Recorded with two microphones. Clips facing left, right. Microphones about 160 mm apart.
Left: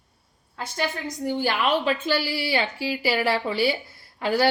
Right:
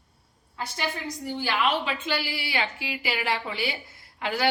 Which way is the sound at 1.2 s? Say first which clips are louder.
Left 3 dB; 45° left (ahead or behind).